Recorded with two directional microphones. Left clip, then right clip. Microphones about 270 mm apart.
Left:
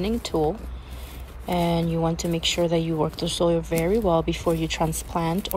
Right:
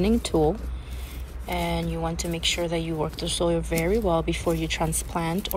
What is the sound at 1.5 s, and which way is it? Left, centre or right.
Speech, centre.